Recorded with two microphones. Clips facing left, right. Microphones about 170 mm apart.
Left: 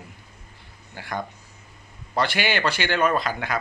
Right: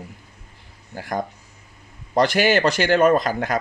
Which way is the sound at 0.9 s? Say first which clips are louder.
Right 5 dB; 45° right (ahead or behind).